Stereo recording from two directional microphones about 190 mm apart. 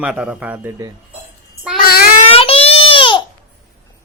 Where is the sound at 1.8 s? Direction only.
50° left (ahead or behind).